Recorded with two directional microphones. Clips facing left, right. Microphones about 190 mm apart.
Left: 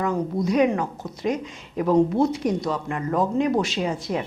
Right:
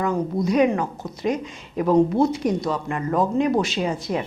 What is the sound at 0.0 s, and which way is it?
A woman's voice, 15° right (ahead or behind).